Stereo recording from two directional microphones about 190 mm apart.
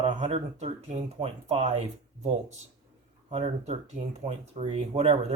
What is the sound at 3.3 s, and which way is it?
Speech, 35° right (ahead or behind).